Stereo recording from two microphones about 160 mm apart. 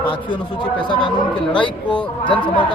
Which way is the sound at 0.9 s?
30° left (ahead or behind).